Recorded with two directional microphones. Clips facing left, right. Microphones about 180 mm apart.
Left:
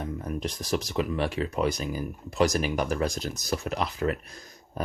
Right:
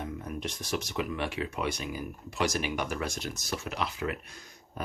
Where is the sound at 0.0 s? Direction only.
35° left (ahead or behind).